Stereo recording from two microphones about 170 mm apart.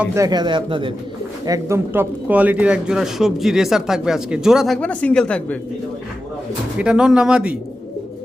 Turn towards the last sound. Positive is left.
turn(degrees=-5)  # may be behind; listen again after turning